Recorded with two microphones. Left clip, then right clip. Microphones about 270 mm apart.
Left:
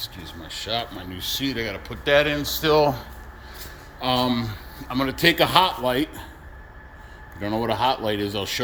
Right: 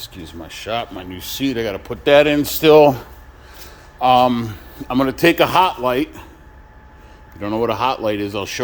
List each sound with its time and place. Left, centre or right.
0.2 s a man's voice: right
1.3 s speech: right
4.0 s a man's voice: centre
7.3 s a man's voice: centre